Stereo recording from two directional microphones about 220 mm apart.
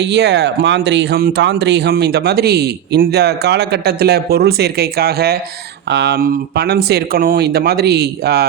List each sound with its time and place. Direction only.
0.0 s speech: 50° right (ahead or behind)